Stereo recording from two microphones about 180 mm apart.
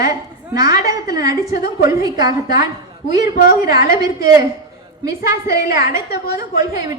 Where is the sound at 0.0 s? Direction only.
20° right (ahead or behind).